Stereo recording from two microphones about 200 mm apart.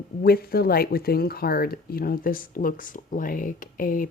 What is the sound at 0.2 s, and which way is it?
Speech, 50° left (ahead or behind).